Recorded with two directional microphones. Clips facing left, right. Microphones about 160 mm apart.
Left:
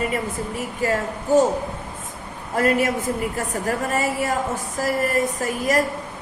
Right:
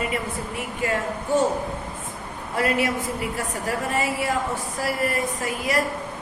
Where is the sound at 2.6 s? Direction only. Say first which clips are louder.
Left 3 dB; 45° left (ahead or behind).